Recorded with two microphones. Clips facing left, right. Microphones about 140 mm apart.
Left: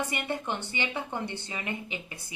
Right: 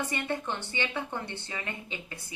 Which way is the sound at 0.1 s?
15° left (ahead or behind).